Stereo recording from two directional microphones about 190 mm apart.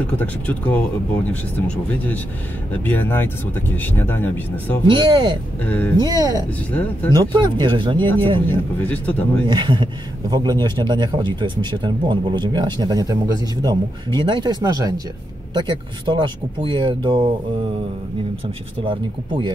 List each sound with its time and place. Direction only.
0.0 s speech: 10° left (ahead or behind)
2.7 s speech: 10° left (ahead or behind)
4.8 s speech: 25° right (ahead or behind)
5.7 s speech: 10° left (ahead or behind)
5.9 s speech: 20° right (ahead or behind)
6.7 s speech: 10° left (ahead or behind)
7.2 s speech: 25° right (ahead or behind)
8.5 s speech: 10° left (ahead or behind)
9.5 s speech: 25° right (ahead or behind)
18.9 s speech: 25° right (ahead or behind)